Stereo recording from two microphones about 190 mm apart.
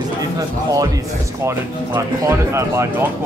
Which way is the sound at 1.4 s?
15° right (ahead or behind).